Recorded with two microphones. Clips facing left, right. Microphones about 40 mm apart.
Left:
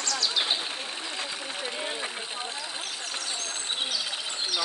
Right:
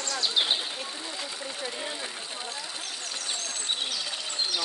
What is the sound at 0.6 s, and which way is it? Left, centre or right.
Speech, left.